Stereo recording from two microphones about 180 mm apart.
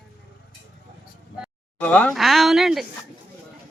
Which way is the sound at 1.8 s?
10° left (ahead or behind).